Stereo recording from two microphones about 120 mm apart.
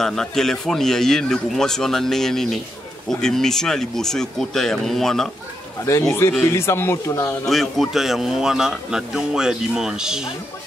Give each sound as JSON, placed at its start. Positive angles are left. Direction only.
{"t": 0.0, "sound": "a man's voice", "side_deg": 5}
{"t": 5.9, "sound": "speech", "side_deg": 25}
{"t": 7.4, "sound": "a man's voice", "side_deg": 0}